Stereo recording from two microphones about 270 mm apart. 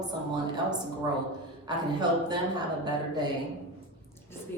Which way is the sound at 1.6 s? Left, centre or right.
Centre.